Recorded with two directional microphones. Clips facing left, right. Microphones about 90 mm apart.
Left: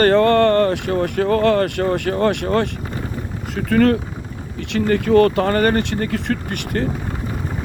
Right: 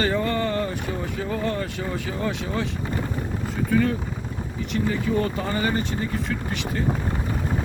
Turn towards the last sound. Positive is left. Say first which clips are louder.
# left 4 dB
turn(degrees=60)  # may be behind; listen again after turning